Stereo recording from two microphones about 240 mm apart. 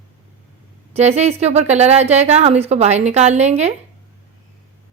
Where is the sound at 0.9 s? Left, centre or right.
Right.